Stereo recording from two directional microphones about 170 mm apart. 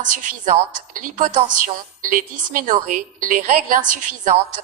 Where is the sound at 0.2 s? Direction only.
50° right (ahead or behind).